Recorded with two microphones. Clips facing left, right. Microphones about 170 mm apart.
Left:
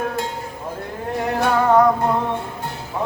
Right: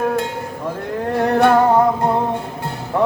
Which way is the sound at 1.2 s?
60° right (ahead or behind).